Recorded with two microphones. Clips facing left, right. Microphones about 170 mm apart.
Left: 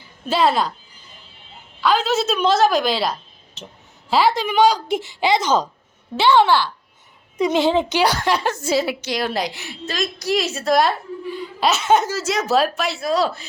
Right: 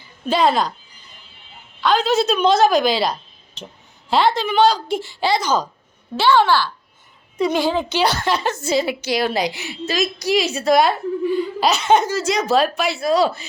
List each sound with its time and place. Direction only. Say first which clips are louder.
0.3 s a woman's voice: right 1 dB; 5° left (ahead or behind)
1.8 s a woman's voice: right 2 dB; 5° left (ahead or behind); by 7.9 s 25° left (ahead or behind)
7.9 s speech: left 1 dB; 10° left (ahead or behind)
9.0 s a woman's voice: right 3 dB; 5° right (ahead or behind)